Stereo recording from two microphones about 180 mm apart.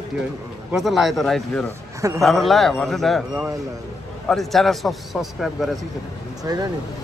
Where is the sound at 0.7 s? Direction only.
Centre (ahead or behind).